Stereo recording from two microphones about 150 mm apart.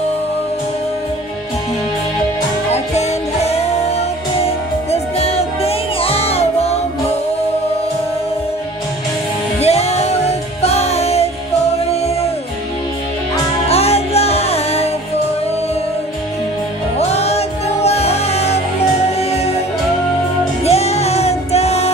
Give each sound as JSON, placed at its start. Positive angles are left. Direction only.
{"t": 4.9, "sound": "music", "side_deg": 45}
{"t": 9.6, "sound": "music", "side_deg": 45}
{"t": 13.7, "sound": "music", "side_deg": 45}
{"t": 17.0, "sound": "music", "side_deg": 45}
{"t": 20.6, "sound": "music", "side_deg": 45}